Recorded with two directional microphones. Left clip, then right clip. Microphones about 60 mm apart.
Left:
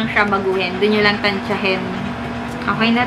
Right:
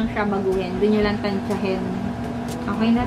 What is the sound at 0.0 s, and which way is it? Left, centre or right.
A woman's voice, left.